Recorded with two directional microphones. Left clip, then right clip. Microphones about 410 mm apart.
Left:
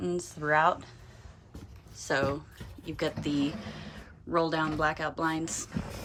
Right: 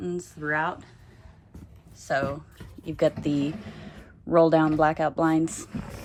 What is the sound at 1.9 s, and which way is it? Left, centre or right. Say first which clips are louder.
Speech: right 2 dB; centre.